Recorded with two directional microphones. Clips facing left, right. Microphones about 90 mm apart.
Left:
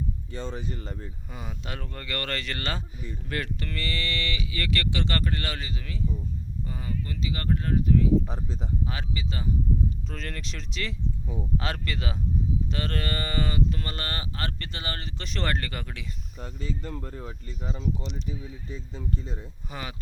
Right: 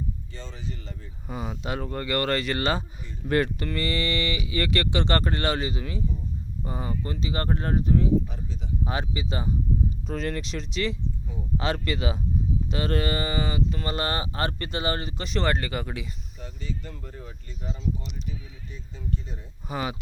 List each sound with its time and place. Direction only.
0.3 s speech: 50° left (ahead or behind)
1.3 s speech: 15° right (ahead or behind)
3.2 s speech: 35° right (ahead or behind)
3.6 s speech: 20° right (ahead or behind)
8.3 s speech: 35° left (ahead or behind)
8.8 s speech: 25° right (ahead or behind)
10.1 s speech: 10° right (ahead or behind)
15.2 s speech: 5° right (ahead or behind)
16.8 s speech: 45° left (ahead or behind)
19.6 s speech: 20° right (ahead or behind)